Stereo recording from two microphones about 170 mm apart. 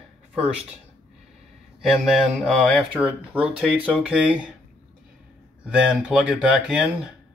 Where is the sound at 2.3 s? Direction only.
5° right (ahead or behind).